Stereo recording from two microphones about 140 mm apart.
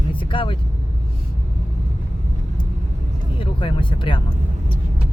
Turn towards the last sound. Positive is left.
turn(degrees=35)  # may be behind; listen again after turning